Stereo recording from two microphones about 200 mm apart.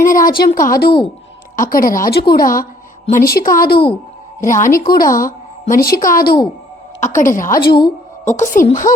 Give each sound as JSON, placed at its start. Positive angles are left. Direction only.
{"t": 0.0, "sound": "a woman's voice", "side_deg": 45}